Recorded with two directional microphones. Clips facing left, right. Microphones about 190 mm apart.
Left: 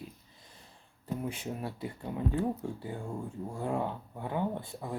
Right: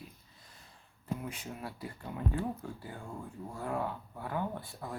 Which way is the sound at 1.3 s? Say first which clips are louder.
Left 5 dB; 25° left (ahead or behind).